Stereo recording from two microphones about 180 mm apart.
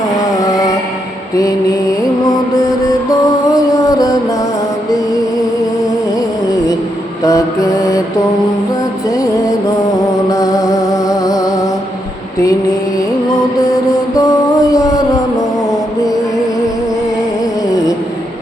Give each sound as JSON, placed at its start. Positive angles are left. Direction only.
{"t": 0.2, "sound": "music", "side_deg": 20}
{"t": 3.1, "sound": "music", "side_deg": 20}
{"t": 6.1, "sound": "music", "side_deg": 20}
{"t": 7.3, "sound": "mantra", "side_deg": 20}
{"t": 10.2, "sound": "music", "side_deg": 20}
{"t": 14.2, "sound": "music", "side_deg": 20}